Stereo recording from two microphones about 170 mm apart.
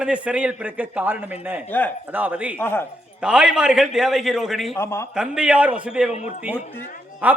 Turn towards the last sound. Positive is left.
turn(degrees=-10)  # may be behind; listen again after turning